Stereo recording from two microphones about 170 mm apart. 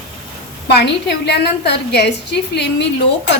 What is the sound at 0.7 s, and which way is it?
A woman's voice, 85° left.